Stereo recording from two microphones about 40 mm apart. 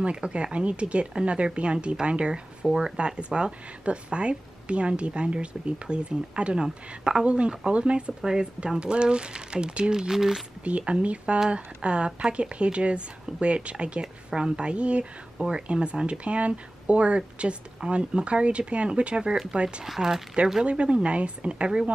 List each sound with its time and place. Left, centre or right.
0.0 s speech: right
8.2 s speech: centre
10.9 s speech: right
19.8 s speech: centre
20.6 s speech: right